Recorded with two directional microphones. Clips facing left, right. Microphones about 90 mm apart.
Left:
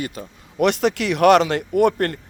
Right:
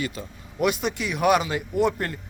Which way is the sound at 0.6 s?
80° left.